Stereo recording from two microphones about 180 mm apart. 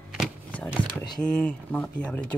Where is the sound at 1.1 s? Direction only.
5° left (ahead or behind).